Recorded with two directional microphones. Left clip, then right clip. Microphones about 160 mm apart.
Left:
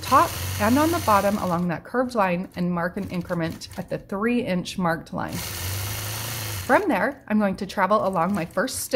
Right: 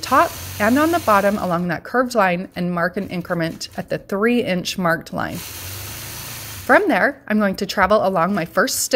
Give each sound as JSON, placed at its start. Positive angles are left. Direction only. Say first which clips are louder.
{"t": 0.1, "sound": "speech", "louder": "right 2 dB", "side_deg": -25}
{"t": 6.7, "sound": "speech", "louder": "right 6 dB", "side_deg": -25}